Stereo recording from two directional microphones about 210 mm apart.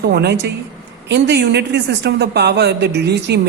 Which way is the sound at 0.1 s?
50° right (ahead or behind).